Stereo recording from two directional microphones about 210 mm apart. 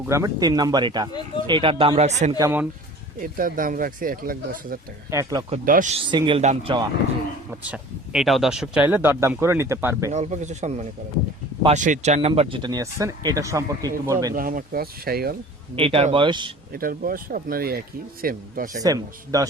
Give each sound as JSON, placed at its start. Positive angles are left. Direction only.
{"t": 0.1, "sound": "speech", "side_deg": -15}
{"t": 2.4, "sound": "speech", "side_deg": -10}
{"t": 3.2, "sound": "speech", "side_deg": -40}
{"t": 5.1, "sound": "speech", "side_deg": -20}
{"t": 5.5, "sound": "speech", "side_deg": -40}
{"t": 6.1, "sound": "speech", "side_deg": -20}
{"t": 7.6, "sound": "speech", "side_deg": -5}
{"t": 10.1, "sound": "speech", "side_deg": -35}
{"t": 14.3, "sound": "speech", "side_deg": -40}
{"t": 15.7, "sound": "speech", "side_deg": -25}
{"t": 16.7, "sound": "speech", "side_deg": -45}
{"t": 18.8, "sound": "speech", "side_deg": -15}